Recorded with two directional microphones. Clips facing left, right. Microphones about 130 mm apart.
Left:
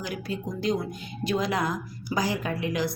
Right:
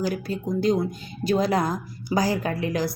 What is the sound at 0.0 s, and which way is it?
Speech, 35° right (ahead or behind).